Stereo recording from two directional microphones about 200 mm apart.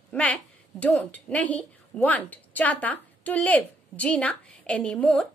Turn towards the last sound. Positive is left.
turn(degrees=5)  # may be behind; listen again after turning